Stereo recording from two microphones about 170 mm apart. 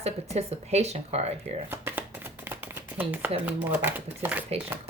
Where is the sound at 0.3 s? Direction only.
40° right (ahead or behind).